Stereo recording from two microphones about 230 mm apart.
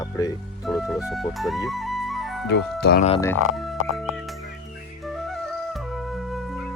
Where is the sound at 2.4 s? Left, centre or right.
Left.